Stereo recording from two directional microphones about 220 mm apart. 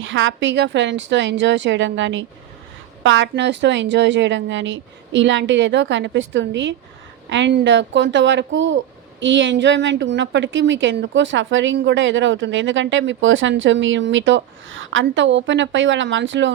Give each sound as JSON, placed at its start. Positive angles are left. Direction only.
{"t": 0.0, "sound": "a woman's voice", "side_deg": -60}